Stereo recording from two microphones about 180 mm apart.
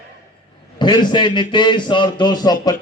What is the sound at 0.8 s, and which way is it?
A man's voice, 25° left (ahead or behind).